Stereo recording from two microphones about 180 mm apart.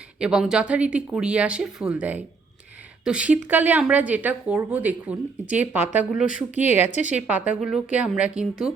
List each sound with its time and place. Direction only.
0.2 s speech: 5° right (ahead or behind)
6.2 s speech: 45° left (ahead or behind)
6.7 s speech: 10° right (ahead or behind)